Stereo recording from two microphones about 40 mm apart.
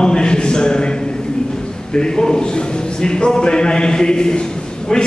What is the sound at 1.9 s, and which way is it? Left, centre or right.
A man's voice, centre.